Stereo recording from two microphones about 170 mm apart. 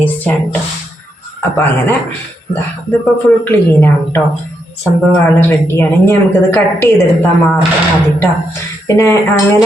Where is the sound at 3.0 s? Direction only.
10° left (ahead or behind).